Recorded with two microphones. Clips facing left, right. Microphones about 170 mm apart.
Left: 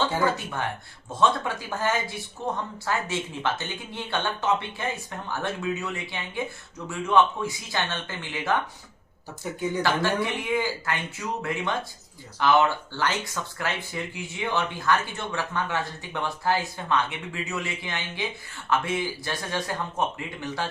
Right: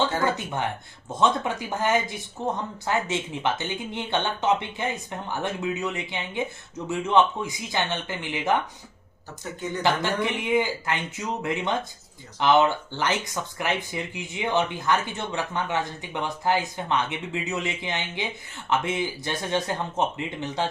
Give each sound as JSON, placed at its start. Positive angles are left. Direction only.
{"t": 0.3, "sound": "speech", "side_deg": -20}
{"t": 9.4, "sound": "speech", "side_deg": 10}
{"t": 9.8, "sound": "speech", "side_deg": -20}